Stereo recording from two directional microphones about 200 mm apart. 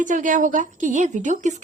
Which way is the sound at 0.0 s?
40° right (ahead or behind).